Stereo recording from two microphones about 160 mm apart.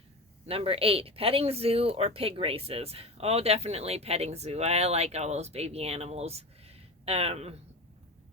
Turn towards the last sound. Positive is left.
turn(degrees=-40)  # may be behind; listen again after turning